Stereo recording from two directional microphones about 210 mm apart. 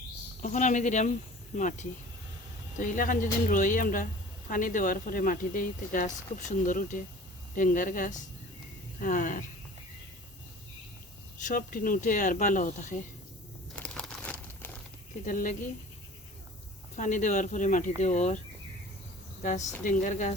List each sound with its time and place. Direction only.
0.4 s speech: 35° left (ahead or behind)
11.4 s speech: 40° left (ahead or behind)
13.7 s crumpling: 5° left (ahead or behind)
15.3 s speech: 40° left (ahead or behind)
17.0 s speech: 35° left (ahead or behind)
19.4 s speech: 35° left (ahead or behind)